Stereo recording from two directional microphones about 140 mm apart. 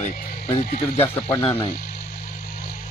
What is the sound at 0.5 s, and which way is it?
Speech, 45° left (ahead or behind).